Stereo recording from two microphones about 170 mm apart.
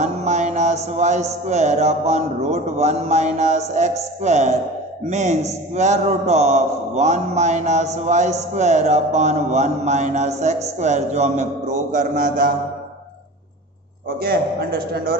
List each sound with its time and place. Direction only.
0.0 s a man's voice: 45° right (ahead or behind)
14.2 s a man's voice: 65° right (ahead or behind)